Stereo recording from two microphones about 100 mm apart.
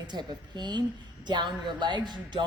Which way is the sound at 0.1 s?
45° right (ahead or behind).